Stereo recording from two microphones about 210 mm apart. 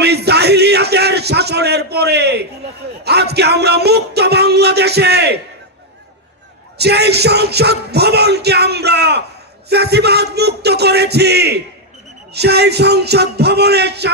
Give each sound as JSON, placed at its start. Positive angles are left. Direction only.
{"t": 0.0, "sound": "a sound", "side_deg": -50}
{"t": 3.0, "sound": "speech", "side_deg": -50}
{"t": 6.8, "sound": "speech", "side_deg": -50}